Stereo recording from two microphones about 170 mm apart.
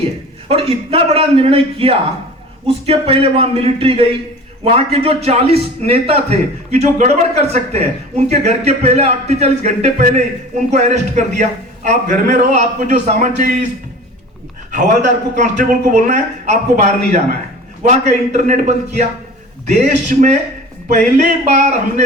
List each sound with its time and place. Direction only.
0.4 s a man's voice: 35° right (ahead or behind)
14.7 s a man's voice: 45° right (ahead or behind)